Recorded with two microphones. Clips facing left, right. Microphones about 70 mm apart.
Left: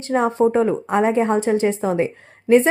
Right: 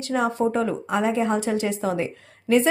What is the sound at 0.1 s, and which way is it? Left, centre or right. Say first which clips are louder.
Speech: left 5 dB; left.